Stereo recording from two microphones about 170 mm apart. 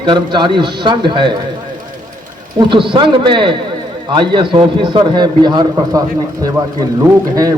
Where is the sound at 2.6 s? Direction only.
30° right (ahead or behind).